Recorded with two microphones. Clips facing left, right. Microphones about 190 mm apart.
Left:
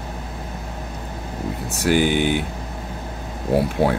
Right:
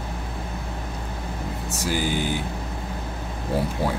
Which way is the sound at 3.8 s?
65° left (ahead or behind).